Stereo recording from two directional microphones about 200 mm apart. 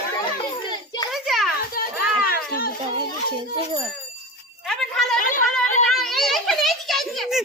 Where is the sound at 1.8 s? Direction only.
45° left (ahead or behind).